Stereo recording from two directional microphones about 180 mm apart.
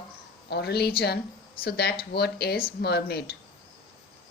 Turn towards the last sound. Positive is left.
turn(degrees=65)  # may be behind; listen again after turning